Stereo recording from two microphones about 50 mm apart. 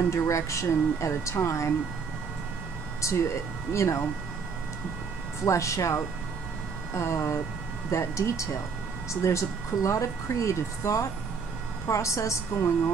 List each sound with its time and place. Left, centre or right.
0.1 s speech: left
3.0 s speech: left
5.4 s a woman's voice: left
6.9 s a woman's voice: left